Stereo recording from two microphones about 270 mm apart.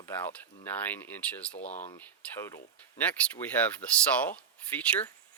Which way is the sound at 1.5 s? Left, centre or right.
Left.